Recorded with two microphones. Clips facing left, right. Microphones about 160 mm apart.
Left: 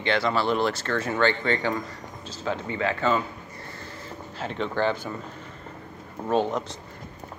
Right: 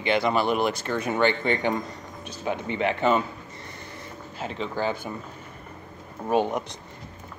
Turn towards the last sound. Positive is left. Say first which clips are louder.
# even
turn(degrees=-15)  # may be behind; listen again after turning